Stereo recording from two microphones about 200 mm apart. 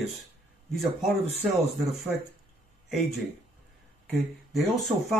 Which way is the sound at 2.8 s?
Centre (ahead or behind).